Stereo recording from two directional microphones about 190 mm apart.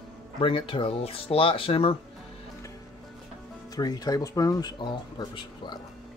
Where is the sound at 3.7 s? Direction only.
20° left (ahead or behind).